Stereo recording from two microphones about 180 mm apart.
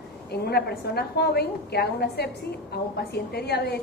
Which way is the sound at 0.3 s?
60° left (ahead or behind).